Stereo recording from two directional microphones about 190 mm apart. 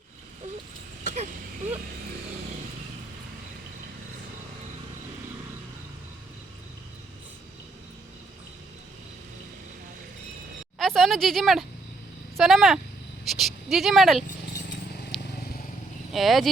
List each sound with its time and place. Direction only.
1.0 s vehicle: 40° right (ahead or behind)
10.8 s speech: centre (ahead or behind)
16.1 s speech: centre (ahead or behind)